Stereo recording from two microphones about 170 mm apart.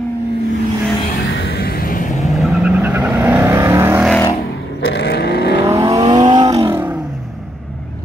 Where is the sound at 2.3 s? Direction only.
5° right (ahead or behind).